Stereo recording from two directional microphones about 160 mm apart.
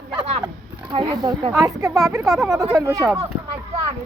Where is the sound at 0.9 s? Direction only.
30° right (ahead or behind).